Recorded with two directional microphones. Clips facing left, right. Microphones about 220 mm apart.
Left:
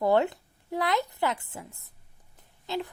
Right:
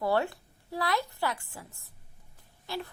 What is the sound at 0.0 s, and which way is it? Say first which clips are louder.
Speech: left 5 dB; 20° left (ahead or behind).